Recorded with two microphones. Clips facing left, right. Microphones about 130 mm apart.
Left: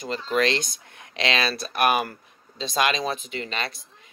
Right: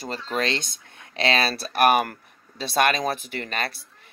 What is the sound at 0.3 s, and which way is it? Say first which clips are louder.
Speech: left 4 dB; 30° right (ahead or behind).